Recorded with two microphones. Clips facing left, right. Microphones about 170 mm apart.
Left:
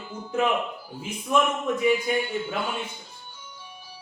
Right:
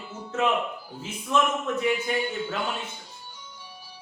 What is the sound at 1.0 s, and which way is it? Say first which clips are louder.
Speech: left 1 dB; 10° left (ahead or behind).